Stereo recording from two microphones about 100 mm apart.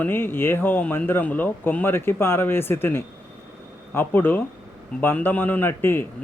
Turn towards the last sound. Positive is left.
turn(degrees=20)  # may be behind; listen again after turning